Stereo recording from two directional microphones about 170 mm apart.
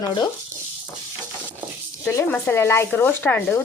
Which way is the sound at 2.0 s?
15° left (ahead or behind).